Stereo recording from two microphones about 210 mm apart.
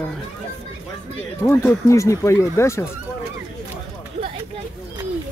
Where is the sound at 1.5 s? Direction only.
10° left (ahead or behind).